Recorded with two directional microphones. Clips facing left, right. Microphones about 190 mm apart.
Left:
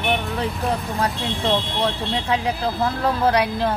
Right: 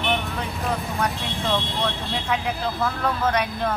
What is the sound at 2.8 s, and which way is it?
Speech, 35° left (ahead or behind).